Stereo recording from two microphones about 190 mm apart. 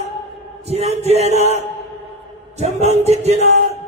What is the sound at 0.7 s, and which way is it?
Music, 35° right (ahead or behind).